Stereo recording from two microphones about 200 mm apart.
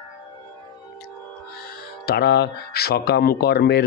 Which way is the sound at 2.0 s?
55° left (ahead or behind).